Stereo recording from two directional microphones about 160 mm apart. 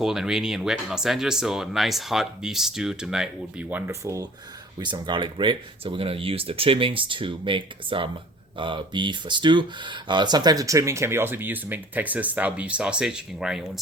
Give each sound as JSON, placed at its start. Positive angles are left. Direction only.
{"t": 0.0, "sound": "speech", "side_deg": -5}